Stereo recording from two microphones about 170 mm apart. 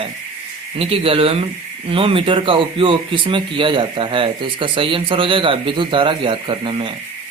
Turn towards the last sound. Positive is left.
turn(degrees=-30)  # may be behind; listen again after turning